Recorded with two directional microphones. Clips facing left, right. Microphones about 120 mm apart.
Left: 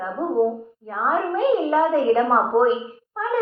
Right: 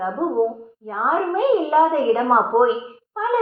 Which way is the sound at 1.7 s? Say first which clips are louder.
Right 1 dB; 10° right (ahead or behind).